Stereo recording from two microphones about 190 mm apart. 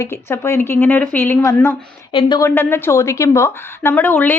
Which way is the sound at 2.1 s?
25° left (ahead or behind).